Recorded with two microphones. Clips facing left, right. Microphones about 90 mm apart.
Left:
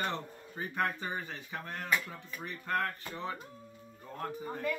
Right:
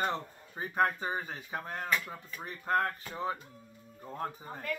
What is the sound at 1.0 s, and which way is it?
Speech, 30° right (ahead or behind).